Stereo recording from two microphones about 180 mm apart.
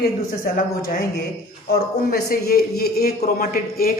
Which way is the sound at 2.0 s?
60° left (ahead or behind).